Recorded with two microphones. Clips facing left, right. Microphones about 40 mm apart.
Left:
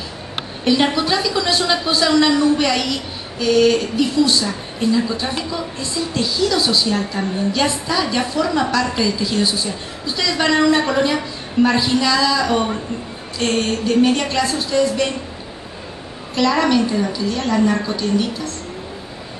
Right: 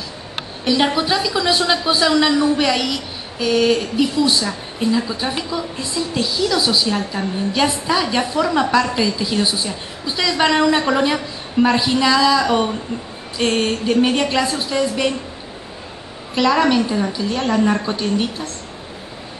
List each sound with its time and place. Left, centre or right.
0.7 s a woman's voice: centre
0.9 s a man's voice: centre
16.3 s a man's voice: centre
17.3 s a woman's voice: right